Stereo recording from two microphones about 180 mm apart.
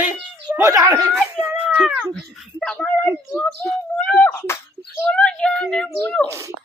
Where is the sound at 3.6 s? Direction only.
5° left (ahead or behind).